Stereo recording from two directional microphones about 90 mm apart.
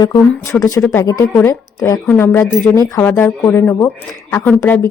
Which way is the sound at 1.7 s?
40° left (ahead or behind).